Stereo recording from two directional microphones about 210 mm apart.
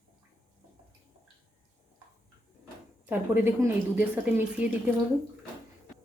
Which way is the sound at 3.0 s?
10° right (ahead or behind).